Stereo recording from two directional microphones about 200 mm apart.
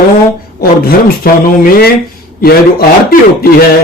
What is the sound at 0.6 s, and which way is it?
Speech, 50° left (ahead or behind).